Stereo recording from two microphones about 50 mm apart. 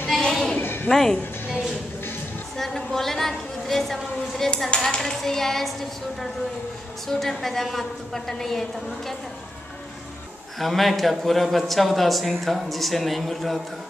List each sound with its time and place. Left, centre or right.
0.1 s a sound: centre
0.6 s a sound: left
0.8 s speech: centre
2.5 s a woman's voice: centre
7.1 s speech: centre
10.6 s speech: centre